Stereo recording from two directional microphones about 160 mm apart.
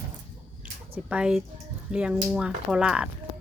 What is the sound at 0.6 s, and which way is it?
Squish, 10° right (ahead or behind).